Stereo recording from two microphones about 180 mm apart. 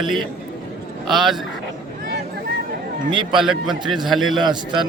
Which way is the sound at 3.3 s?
5° right (ahead or behind).